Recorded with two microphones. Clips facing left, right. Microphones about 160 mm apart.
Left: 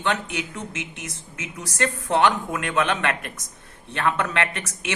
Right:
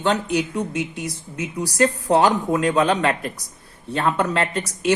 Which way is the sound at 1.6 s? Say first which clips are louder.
Right 7 dB; 35° right (ahead or behind).